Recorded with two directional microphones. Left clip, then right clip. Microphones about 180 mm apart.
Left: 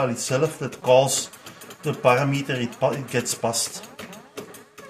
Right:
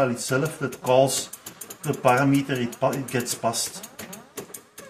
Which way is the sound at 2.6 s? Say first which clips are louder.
Left 1 dB; 40° left (ahead or behind).